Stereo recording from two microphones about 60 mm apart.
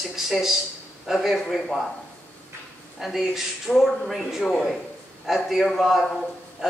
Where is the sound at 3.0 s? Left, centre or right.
Centre.